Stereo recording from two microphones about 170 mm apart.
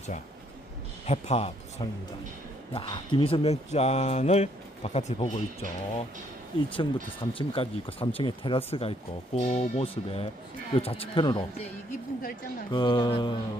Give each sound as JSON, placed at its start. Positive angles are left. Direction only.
{"t": 1.0, "sound": "speech", "side_deg": 40}
{"t": 12.7, "sound": "mantra", "side_deg": 25}